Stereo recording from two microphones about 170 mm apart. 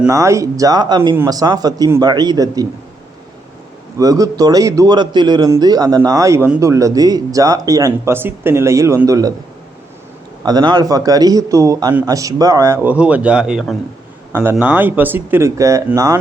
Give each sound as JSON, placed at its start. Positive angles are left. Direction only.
{"t": 0.1, "sound": "speech", "side_deg": -20}
{"t": 3.9, "sound": "speech", "side_deg": -20}
{"t": 10.4, "sound": "speech", "side_deg": -25}